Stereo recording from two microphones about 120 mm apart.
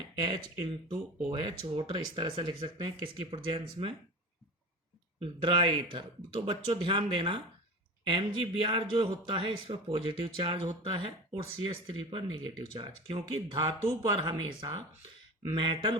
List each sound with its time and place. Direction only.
0.2 s speech: 40° right (ahead or behind)
5.2 s speech: 45° right (ahead or behind)
11.6 s speech: 45° right (ahead or behind)